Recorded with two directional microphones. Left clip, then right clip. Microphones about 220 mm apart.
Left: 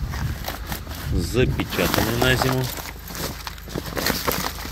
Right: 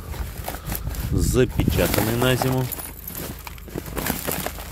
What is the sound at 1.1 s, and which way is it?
Speech, 30° right (ahead or behind).